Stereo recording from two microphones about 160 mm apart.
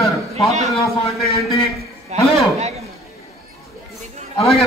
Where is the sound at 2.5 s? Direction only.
40° right (ahead or behind).